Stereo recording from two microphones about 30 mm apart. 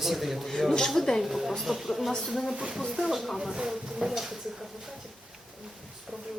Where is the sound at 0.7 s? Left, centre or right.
Centre.